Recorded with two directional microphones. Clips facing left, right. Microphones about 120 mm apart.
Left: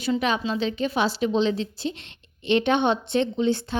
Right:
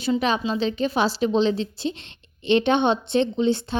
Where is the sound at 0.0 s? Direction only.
30° right (ahead or behind).